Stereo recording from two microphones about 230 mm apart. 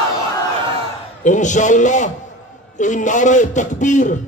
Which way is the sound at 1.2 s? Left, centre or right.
Left.